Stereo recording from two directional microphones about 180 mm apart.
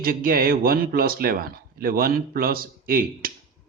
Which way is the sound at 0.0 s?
55° right (ahead or behind).